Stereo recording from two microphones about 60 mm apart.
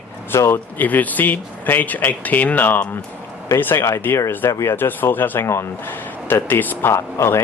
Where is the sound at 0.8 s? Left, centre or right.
Left.